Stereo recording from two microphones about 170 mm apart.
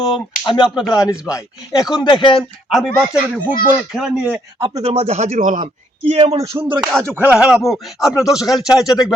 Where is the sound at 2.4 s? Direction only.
Centre (ahead or behind).